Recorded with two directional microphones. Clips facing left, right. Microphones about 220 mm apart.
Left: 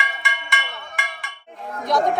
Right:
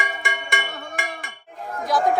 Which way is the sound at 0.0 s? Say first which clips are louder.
Right 2 dB; 50° right (ahead or behind).